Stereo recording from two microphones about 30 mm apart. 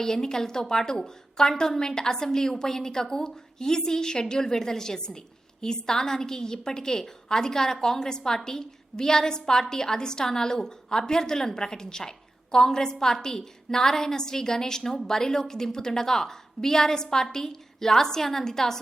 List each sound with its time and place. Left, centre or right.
0.0 s a woman's voice: centre